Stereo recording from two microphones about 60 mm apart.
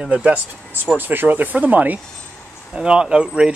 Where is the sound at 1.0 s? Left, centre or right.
Right.